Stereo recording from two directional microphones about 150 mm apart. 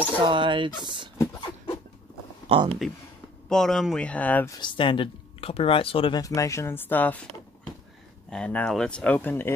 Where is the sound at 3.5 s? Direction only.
Centre (ahead or behind).